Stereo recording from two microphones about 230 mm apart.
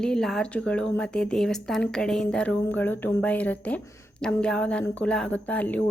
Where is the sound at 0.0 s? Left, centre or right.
Centre.